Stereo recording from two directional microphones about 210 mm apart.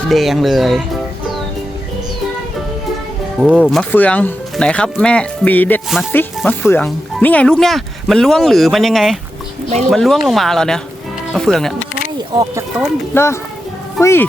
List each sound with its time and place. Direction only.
0.1 s speech: centre (ahead or behind)
3.4 s speech: 5° left (ahead or behind)
12.3 s speech: 20° right (ahead or behind)
13.1 s speech: 10° left (ahead or behind)